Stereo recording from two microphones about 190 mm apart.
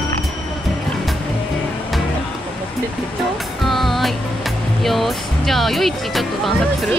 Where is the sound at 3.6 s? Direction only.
Centre (ahead or behind).